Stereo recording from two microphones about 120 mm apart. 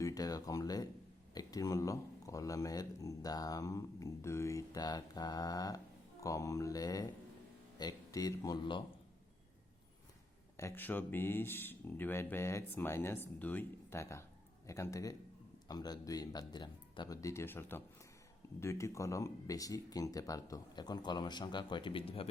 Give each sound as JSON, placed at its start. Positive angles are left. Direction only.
{"t": 0.0, "sound": "speech", "side_deg": 30}
{"t": 10.6, "sound": "speech", "side_deg": 20}
{"t": 17.2, "sound": "speech", "side_deg": 25}